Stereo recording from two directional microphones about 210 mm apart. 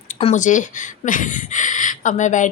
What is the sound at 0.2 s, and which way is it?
Speech, 35° left (ahead or behind).